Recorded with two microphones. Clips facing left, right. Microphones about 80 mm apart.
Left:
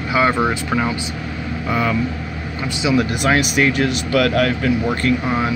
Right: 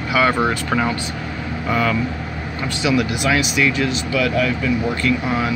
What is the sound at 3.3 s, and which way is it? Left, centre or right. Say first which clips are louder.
Speech: left 2 dB; left.